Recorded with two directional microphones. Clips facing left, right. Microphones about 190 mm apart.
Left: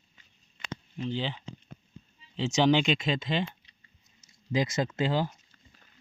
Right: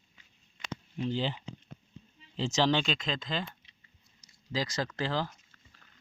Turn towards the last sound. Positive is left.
turn(degrees=20)  # may be behind; listen again after turning